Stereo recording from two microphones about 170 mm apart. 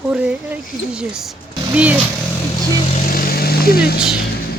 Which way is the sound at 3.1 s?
60° left (ahead or behind).